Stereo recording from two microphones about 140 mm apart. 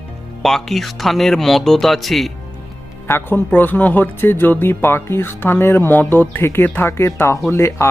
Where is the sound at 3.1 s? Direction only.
15° left (ahead or behind).